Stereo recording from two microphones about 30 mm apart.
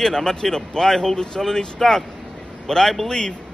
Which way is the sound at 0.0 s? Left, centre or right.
Centre.